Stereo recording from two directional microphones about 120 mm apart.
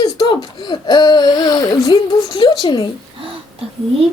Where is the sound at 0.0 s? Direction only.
40° left (ahead or behind).